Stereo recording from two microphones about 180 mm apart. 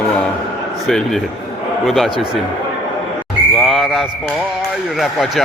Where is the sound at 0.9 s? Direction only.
Centre (ahead or behind).